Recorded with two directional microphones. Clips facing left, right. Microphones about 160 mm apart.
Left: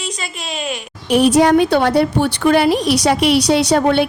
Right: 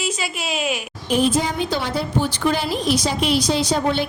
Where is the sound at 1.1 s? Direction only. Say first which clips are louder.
Left 8 dB; 70° left (ahead or behind).